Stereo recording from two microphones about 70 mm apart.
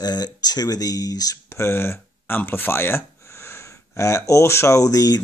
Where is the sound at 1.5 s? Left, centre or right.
Left.